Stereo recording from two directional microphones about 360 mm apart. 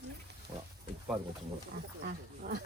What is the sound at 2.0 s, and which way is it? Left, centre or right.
Speech, right.